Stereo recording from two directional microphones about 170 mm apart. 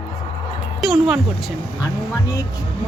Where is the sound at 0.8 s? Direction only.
Centre (ahead or behind).